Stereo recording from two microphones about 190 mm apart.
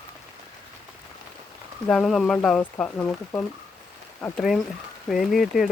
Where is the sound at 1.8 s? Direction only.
5° left (ahead or behind).